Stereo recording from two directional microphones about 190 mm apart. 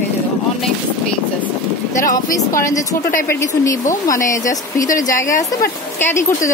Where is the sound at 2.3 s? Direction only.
15° left (ahead or behind).